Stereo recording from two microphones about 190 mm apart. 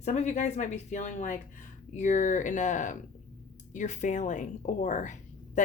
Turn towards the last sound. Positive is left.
turn(degrees=40)  # may be behind; listen again after turning